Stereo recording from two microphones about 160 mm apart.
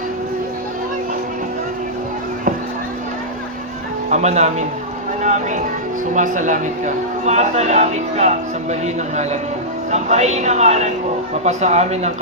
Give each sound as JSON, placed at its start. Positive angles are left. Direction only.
{"t": 4.1, "sound": "a man's voice", "side_deg": -45}
{"t": 5.2, "sound": "music", "side_deg": -50}
{"t": 6.1, "sound": "a man's voice", "side_deg": -50}
{"t": 9.9, "sound": "a man's voice", "side_deg": -45}